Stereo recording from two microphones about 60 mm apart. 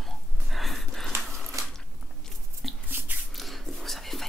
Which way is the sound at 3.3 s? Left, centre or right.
Centre.